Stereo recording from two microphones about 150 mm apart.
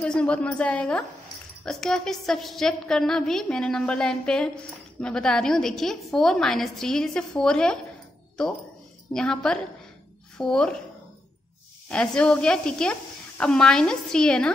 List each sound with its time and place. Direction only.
0.0 s a woman's voice: 5° left (ahead or behind)
9.1 s a woman's voice: 5° left (ahead or behind)
11.9 s a woman's voice: 5° left (ahead or behind)